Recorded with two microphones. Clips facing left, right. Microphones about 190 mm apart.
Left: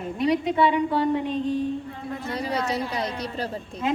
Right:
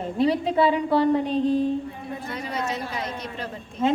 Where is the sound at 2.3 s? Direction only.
35° left (ahead or behind).